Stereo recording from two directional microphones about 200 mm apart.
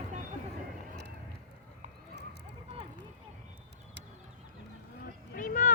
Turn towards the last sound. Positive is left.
turn(degrees=40)  # may be behind; listen again after turning